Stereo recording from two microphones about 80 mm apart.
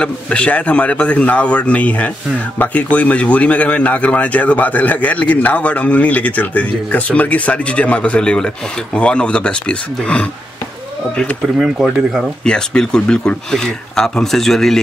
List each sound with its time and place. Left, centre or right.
0.0 s a man's voice: centre
11.4 s speech: centre
12.4 s a man's voice: centre